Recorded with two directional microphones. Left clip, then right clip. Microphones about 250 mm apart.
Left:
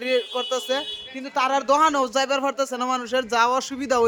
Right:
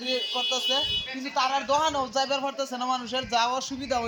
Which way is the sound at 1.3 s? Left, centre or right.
Left.